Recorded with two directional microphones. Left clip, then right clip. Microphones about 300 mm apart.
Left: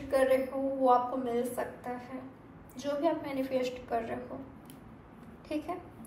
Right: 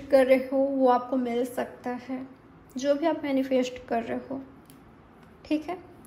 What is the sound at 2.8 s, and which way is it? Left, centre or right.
A woman's voice, right.